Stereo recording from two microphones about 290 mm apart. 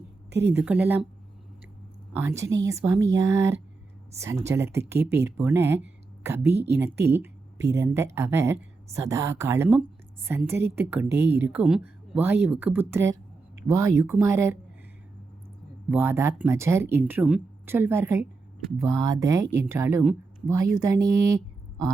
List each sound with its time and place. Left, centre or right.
0.3 s a woman's voice: right
0.5 s speech: centre
2.1 s speech: centre
6.5 s speech: right
6.7 s speech: centre
15.9 s speech: centre